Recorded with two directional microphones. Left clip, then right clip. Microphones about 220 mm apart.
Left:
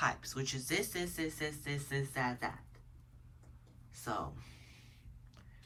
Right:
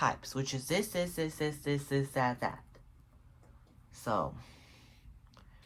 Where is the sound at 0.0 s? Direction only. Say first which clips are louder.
Right 3 dB; 15° right (ahead or behind).